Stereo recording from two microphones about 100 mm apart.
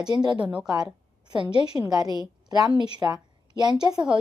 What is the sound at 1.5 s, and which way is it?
A woman's voice, 45° right (ahead or behind).